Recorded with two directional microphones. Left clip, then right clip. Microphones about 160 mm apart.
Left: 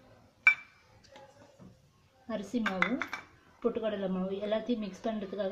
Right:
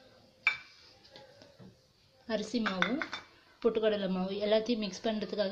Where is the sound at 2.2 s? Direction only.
5° right (ahead or behind).